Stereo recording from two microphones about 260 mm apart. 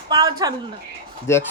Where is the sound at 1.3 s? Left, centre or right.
Centre.